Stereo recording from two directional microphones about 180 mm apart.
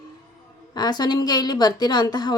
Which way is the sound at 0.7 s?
20° left (ahead or behind).